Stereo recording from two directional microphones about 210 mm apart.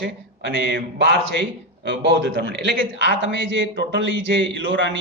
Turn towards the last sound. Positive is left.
turn(degrees=-60)  # may be behind; listen again after turning